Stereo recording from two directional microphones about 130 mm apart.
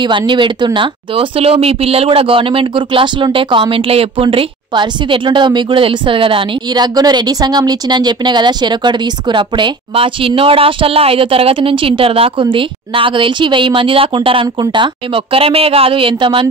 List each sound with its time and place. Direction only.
0.3 s speech: 35° right (ahead or behind)